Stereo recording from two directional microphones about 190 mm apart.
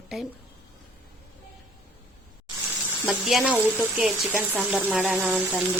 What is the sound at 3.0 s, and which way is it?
Speech, centre (ahead or behind).